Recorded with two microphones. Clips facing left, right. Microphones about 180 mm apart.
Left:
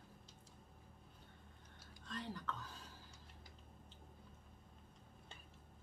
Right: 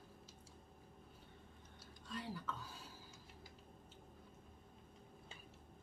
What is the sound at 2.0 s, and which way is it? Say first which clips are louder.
Speech: even; 5° right (ahead or behind).